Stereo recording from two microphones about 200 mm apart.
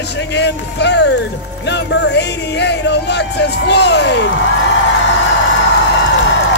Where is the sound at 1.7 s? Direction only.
60° left (ahead or behind).